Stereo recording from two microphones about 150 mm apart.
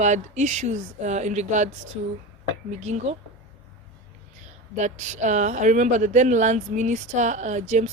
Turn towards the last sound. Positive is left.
turn(degrees=-55)  # may be behind; listen again after turning